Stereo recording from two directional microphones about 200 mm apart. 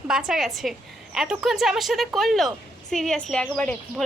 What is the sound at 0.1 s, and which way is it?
A woman's voice, 5° right (ahead or behind).